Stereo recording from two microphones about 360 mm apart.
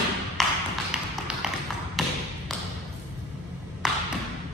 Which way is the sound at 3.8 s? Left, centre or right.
Centre.